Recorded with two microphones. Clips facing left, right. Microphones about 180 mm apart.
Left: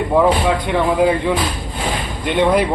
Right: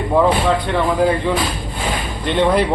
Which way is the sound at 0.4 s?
10° left (ahead or behind).